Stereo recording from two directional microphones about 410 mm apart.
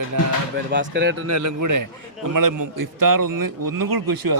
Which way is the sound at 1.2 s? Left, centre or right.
Right.